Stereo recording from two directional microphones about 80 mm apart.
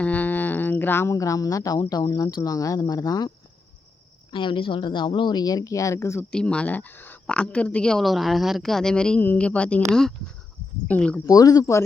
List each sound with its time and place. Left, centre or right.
0.0 s a sound: left
1.1 s speech: left
4.3 s speech: left
6.3 s speech: centre
7.3 s speech: centre
9.2 s speech: left
10.8 s speech: centre
11.3 s speech: left